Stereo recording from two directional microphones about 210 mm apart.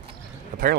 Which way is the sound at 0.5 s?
35° right (ahead or behind).